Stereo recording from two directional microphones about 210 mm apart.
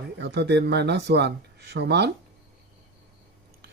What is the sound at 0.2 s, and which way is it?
Speech, 55° right (ahead or behind).